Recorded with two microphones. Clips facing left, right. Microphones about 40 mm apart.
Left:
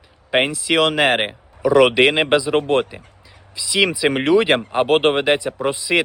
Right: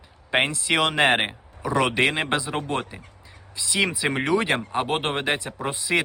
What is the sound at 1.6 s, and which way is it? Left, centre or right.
Speech, left.